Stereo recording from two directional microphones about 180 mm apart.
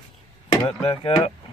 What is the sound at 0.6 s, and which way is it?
Speech, 30° left (ahead or behind).